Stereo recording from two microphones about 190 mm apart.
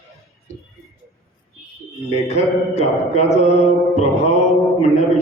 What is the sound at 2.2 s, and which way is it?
Music, 35° left (ahead or behind).